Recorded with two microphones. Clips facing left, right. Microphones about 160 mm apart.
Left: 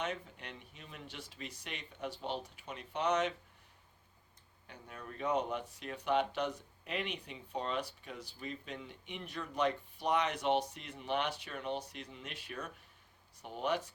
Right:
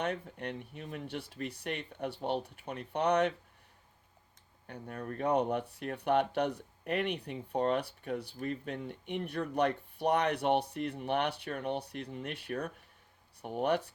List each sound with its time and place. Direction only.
0.0 s speech: 55° right (ahead or behind)
4.6 s speech: 55° right (ahead or behind)